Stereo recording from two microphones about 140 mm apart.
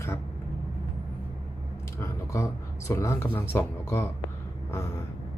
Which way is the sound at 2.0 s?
20° left (ahead or behind).